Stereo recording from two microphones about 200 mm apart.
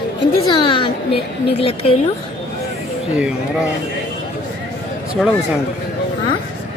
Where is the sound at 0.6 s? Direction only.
25° left (ahead or behind).